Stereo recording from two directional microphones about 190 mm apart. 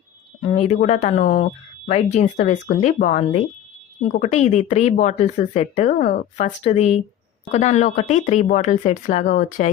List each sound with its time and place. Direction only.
0.4 s speech: 35° left (ahead or behind)